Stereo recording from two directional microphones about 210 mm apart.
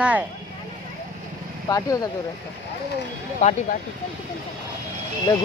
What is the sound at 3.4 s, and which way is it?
Speech, 35° left (ahead or behind).